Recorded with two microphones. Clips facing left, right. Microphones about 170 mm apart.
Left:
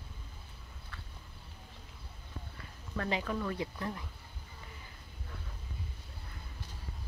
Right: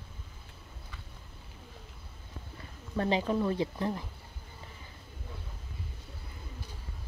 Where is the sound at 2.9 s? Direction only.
25° right (ahead or behind).